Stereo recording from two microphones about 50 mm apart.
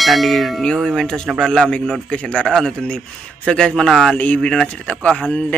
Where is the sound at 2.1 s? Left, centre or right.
Left.